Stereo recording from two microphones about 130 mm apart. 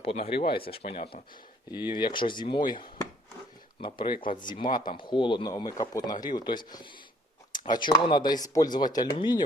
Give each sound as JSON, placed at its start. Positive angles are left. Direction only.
{"t": 0.0, "sound": "speech", "side_deg": 50}